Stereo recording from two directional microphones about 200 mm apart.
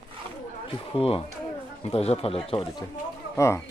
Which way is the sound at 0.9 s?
30° left (ahead or behind).